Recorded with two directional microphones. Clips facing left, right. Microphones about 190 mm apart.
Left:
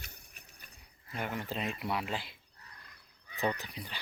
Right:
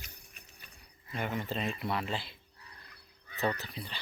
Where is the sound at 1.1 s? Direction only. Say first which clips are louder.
Right 2 dB; 10° left (ahead or behind).